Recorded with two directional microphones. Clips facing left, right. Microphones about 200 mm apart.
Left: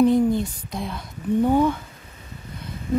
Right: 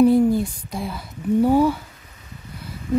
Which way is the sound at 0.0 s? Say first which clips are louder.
Right 2 dB; 5° right (ahead or behind).